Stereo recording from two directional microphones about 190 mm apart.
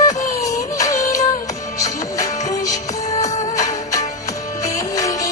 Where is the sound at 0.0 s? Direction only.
15° left (ahead or behind).